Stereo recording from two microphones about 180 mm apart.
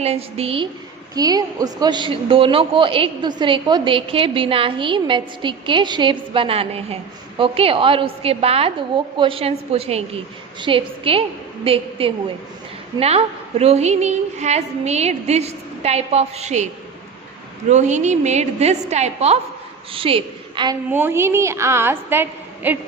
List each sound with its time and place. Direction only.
0.0 s a woman's voice: 35° right (ahead or behind)
1.1 s a woman's voice: 20° right (ahead or behind); by 16.6 s 40° right (ahead or behind)
17.7 s a woman's voice: 40° right (ahead or behind)
20.9 s a woman's voice: 15° right (ahead or behind)